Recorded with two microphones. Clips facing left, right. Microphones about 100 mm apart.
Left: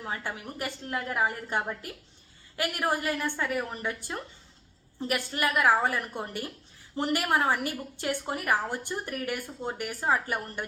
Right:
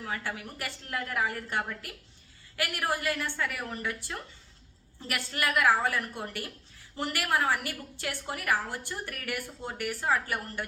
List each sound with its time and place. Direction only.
0.0 s a woman's voice: 20° left (ahead or behind)